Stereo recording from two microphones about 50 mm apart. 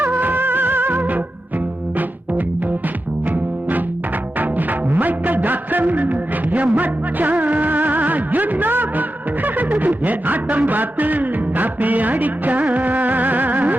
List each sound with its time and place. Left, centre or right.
0.0 s music: right